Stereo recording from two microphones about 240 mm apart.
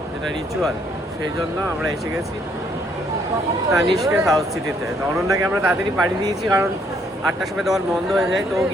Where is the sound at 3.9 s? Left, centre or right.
Centre.